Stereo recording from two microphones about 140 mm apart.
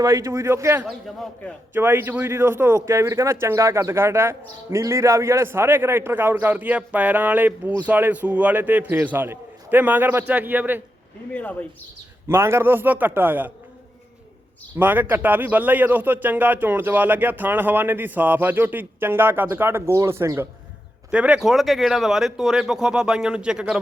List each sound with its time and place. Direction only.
0.0 s speech: 25° right (ahead or behind)
0.9 s speech: centre (ahead or behind)
1.7 s speech: 15° right (ahead or behind)
12.3 s speech: 15° right (ahead or behind)
14.8 s speech: 15° right (ahead or behind)
21.1 s speech: 5° right (ahead or behind)